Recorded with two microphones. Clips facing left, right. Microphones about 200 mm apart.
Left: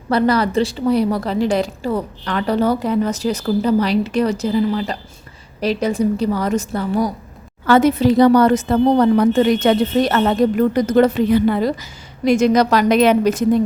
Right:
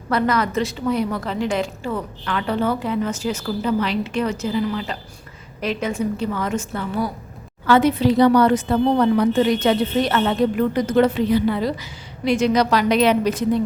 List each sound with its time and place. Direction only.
0.1 s a woman's voice: 35° left (ahead or behind)